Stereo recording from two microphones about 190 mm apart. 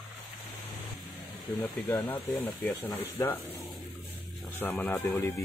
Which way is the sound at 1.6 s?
10° left (ahead or behind).